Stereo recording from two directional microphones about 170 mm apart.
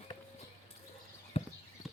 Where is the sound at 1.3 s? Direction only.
35° left (ahead or behind).